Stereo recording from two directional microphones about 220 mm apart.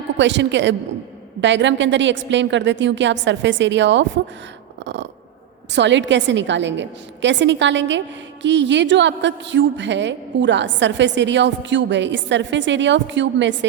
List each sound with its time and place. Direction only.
0.2 s a woman's voice: 55° right (ahead or behind)
5.7 s a woman's voice: 55° right (ahead or behind)